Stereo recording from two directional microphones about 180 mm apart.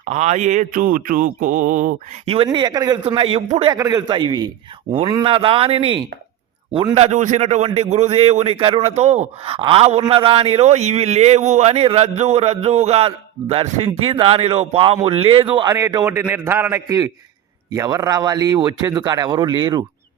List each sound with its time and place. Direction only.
0.0 s mantra: 40° right (ahead or behind)
2.2 s a man's voice: 30° right (ahead or behind)
6.9 s a man's voice: 40° right (ahead or behind)